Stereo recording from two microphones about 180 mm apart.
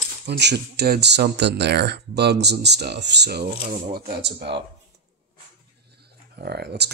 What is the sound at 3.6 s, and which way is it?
Speech, 50° right (ahead or behind).